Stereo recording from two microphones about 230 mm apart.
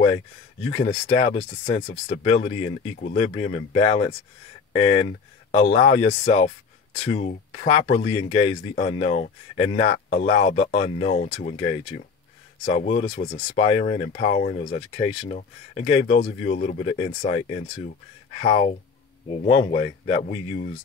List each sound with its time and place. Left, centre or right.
0.7 s speech: left
1.8 s speech: left
2.2 s speech: left